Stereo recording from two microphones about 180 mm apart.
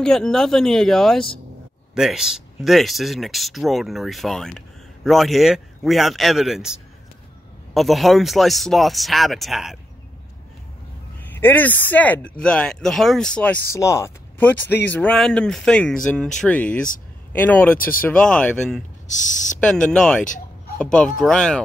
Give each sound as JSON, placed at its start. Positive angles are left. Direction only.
{"t": 0.0, "sound": "speech", "side_deg": 0}
{"t": 11.2, "sound": "speech", "side_deg": 10}
{"t": 19.0, "sound": "speech", "side_deg": 45}
{"t": 19.6, "sound": "speech", "side_deg": 5}
{"t": 20.2, "sound": "a sound", "side_deg": 45}
{"t": 20.7, "sound": "speech", "side_deg": 5}